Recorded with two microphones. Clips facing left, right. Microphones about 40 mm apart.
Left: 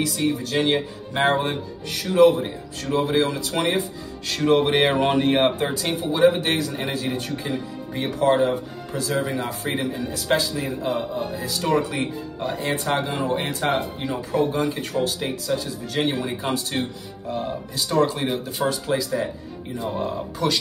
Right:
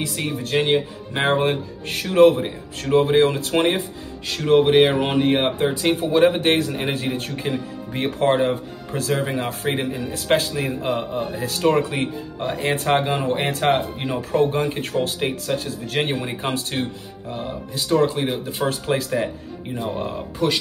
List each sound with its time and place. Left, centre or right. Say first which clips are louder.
0.2 s a man's voice: right 2 dB; right
4.3 s speech: right 3 dB; centre
5.9 s a man's voice: right 1 dB; right
14.0 s a man's voice: right 3 dB; right
17.3 s a man's voice: left 2 dB; right